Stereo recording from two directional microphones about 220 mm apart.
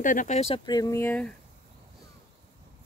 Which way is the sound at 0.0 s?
35° left (ahead or behind).